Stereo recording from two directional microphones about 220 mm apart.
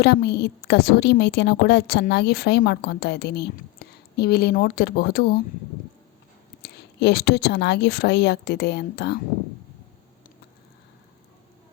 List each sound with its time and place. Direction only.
0.0 s a woman's voice: 50° left (ahead or behind)
6.6 s a woman's voice: 45° left (ahead or behind)